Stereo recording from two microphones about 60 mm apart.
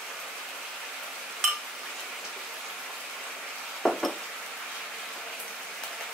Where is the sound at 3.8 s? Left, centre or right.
Centre.